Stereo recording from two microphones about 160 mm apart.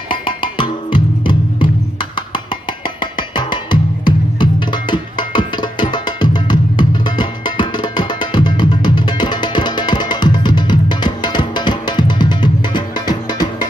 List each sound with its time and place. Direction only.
0.1 s music: 30° left (ahead or behind)